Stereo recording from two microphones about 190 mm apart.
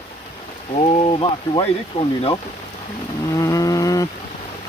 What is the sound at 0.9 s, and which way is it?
Speech, 30° left (ahead or behind).